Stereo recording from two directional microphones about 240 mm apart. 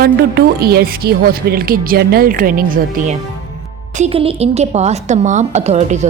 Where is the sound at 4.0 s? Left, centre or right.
Right.